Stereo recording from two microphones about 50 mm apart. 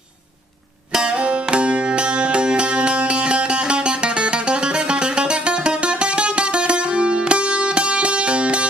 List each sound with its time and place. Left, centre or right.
0.9 s music: centre